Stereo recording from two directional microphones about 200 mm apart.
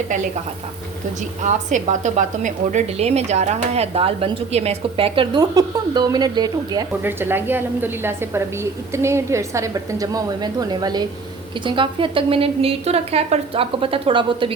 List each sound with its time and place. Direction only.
1.5 s a woman's voice: 40° right (ahead or behind)